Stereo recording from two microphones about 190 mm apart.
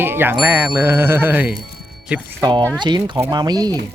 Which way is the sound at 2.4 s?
20° right (ahead or behind).